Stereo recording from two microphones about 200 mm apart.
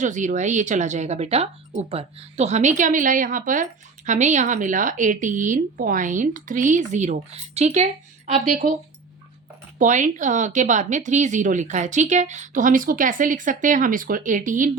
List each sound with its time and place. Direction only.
0.0 s speech: 40° right (ahead or behind)
9.7 s speech: 40° right (ahead or behind)